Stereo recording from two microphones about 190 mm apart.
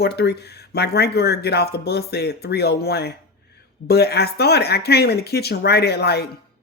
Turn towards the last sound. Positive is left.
turn(degrees=60)  # may be behind; listen again after turning